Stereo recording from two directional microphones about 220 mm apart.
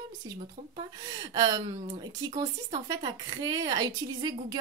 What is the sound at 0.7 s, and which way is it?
Speech, 20° right (ahead or behind).